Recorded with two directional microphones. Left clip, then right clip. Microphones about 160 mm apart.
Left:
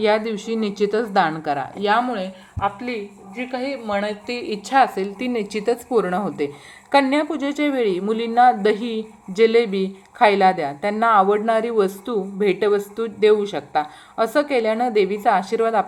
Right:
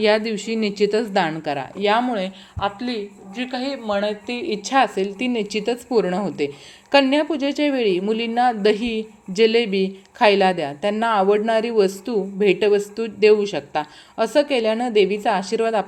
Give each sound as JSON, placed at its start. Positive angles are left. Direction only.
{"t": 0.0, "sound": "speech", "side_deg": -20}